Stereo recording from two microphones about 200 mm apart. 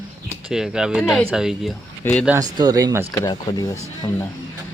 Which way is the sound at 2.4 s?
20° right (ahead or behind).